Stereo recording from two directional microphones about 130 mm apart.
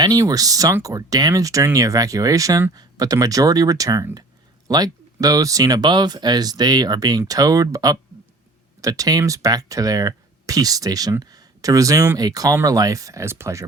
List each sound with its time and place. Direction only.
0.0 s speech: 30° right (ahead or behind)